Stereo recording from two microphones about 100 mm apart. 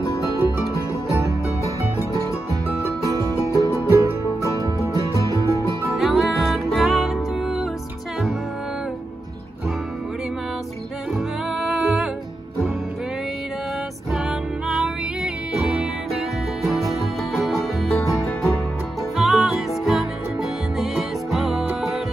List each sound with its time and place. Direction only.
0.0 s music: 35° left (ahead or behind)
3.1 s music: 35° right (ahead or behind)
3.5 s music: 35° left (ahead or behind)
5.9 s music: centre (ahead or behind)
11.5 s music: 5° right (ahead or behind)
14.7 s music: 5° right (ahead or behind)
17.3 s music: centre (ahead or behind)